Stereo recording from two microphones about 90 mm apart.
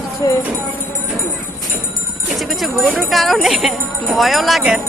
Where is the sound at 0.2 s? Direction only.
45° left (ahead or behind).